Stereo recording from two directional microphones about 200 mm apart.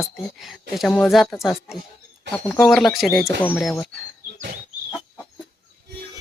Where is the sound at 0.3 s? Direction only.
Centre (ahead or behind).